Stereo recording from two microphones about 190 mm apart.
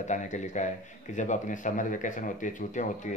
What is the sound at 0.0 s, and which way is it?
A man's voice, 40° left (ahead or behind).